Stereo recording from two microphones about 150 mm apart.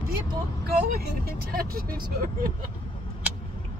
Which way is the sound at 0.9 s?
90° right.